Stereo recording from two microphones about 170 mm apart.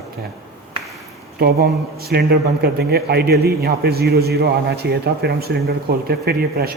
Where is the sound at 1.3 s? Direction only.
70° right (ahead or behind).